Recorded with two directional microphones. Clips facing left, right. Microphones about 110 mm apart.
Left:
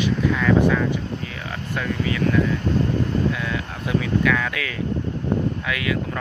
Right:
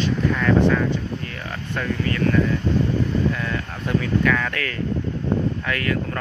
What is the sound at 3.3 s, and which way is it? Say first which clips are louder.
Speech: even; 5° left (ahead or behind).